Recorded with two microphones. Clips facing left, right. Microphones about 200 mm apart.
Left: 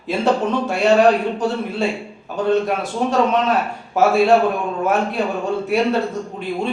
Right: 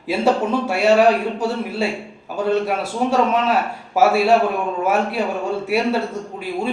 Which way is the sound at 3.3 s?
5° right (ahead or behind).